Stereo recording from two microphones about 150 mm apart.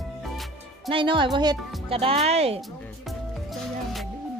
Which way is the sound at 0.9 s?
35° right (ahead or behind).